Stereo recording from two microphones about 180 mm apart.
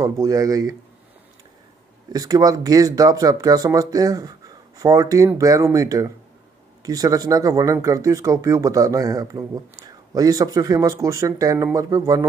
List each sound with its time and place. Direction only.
0.0 s speech: 20° right (ahead or behind)
2.1 s speech: 20° right (ahead or behind)